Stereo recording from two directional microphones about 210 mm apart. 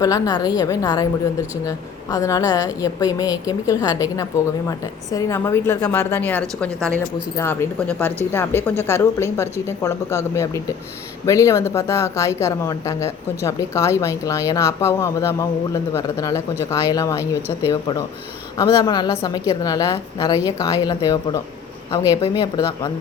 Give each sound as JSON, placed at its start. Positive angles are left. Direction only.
{"t": 0.0, "sound": "a woman's voice", "side_deg": 15}